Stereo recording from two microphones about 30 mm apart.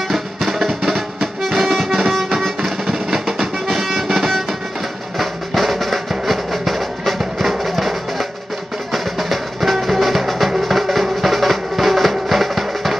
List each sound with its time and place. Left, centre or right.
0.1 s music: centre
2.6 s music: centre
3.3 s music: centre
5.1 s music: centre